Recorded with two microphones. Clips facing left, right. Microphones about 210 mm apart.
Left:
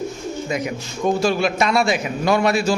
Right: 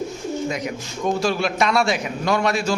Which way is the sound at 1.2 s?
Centre (ahead or behind).